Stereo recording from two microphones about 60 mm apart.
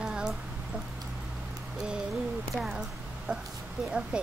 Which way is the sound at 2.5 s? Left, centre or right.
Centre.